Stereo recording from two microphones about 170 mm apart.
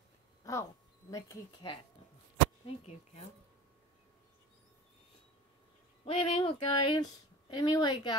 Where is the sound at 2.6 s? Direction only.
40° left (ahead or behind).